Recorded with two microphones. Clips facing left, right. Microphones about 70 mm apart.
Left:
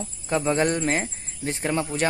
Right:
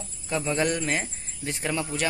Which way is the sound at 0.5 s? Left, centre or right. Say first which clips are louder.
Left 3 dB; left.